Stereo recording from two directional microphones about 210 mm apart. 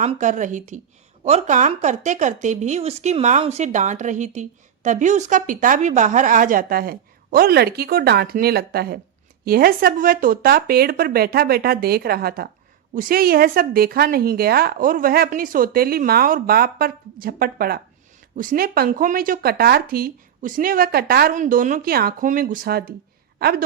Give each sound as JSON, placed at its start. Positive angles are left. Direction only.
{"t": 0.0, "sound": "a woman's voice", "side_deg": -35}